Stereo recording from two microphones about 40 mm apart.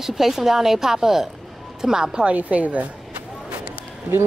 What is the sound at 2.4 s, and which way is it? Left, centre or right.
Speech, right.